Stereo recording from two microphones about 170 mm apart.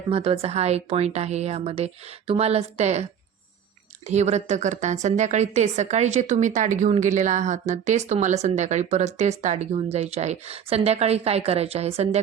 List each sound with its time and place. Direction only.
0.1 s a woman's voice: 35° right (ahead or behind)